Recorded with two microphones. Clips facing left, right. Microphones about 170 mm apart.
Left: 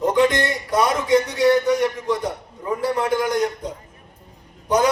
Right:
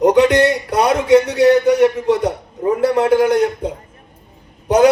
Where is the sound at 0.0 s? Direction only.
75° right (ahead or behind).